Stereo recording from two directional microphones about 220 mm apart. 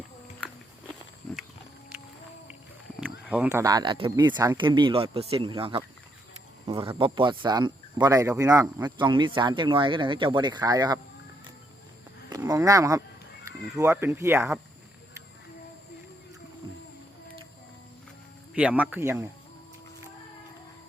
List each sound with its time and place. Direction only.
0.3 s walk: centre (ahead or behind)
3.0 s speech: 5° right (ahead or behind)
12.3 s a sound: 15° right (ahead or behind)
13.7 s speech: 10° right (ahead or behind)
18.5 s speech: 5° right (ahead or behind)